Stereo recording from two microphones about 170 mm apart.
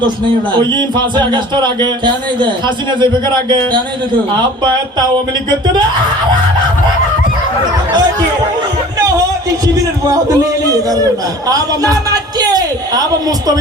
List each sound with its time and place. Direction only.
0.5 s speech: 25° right (ahead or behind)
4.4 s speech: 25° right (ahead or behind)
10.2 s a man's voice: 20° right (ahead or behind)